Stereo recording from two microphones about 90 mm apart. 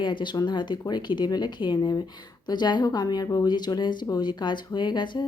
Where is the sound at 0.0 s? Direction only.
60° left (ahead or behind).